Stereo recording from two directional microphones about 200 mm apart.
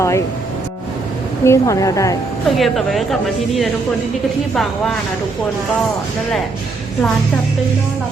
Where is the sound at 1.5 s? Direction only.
15° left (ahead or behind).